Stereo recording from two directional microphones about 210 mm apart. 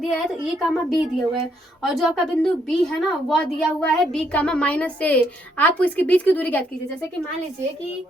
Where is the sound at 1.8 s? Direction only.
Centre (ahead or behind).